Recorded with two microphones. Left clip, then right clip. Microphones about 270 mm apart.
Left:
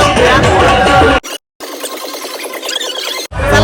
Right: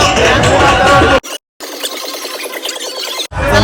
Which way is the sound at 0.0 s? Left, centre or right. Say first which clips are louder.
Left 1 dB; left.